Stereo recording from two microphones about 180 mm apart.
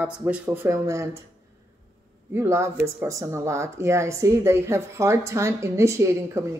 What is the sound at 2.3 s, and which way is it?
Speech, 15° right (ahead or behind).